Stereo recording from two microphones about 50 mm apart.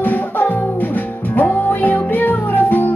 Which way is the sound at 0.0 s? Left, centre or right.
Left.